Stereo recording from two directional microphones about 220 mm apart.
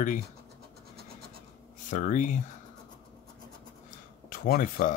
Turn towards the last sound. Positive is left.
turn(degrees=40)  # may be behind; listen again after turning